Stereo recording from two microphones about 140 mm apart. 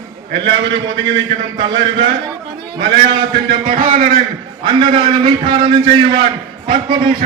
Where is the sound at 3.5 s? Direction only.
75° right (ahead or behind); by 4.2 s 90° right.